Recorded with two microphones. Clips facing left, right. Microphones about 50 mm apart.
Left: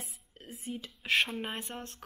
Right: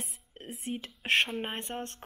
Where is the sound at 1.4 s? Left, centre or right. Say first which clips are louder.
Right 2 dB; right.